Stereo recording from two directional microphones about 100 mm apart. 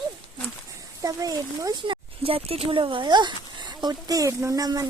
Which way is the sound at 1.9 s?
70° right (ahead or behind).